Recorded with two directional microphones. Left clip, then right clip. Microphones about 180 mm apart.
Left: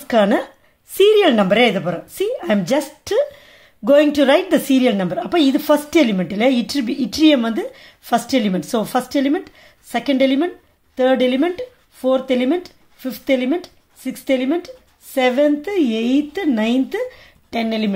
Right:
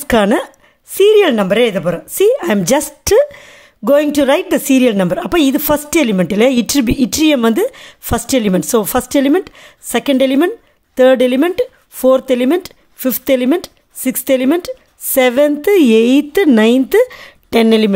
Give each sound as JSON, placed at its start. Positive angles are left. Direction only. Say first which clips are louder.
{"t": 0.0, "sound": "speech", "louder": "right 3 dB", "side_deg": -45}
{"t": 0.9, "sound": "a woman's voice", "louder": "right 3 dB", "side_deg": -30}